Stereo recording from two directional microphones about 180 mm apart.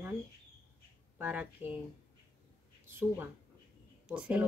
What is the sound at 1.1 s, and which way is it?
Speech, 10° right (ahead or behind).